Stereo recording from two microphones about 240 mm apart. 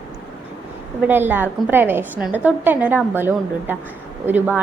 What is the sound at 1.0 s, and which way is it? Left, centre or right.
A woman's voice, centre.